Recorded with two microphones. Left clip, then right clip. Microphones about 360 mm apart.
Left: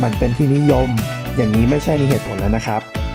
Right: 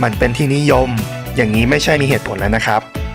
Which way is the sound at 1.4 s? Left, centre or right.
Right.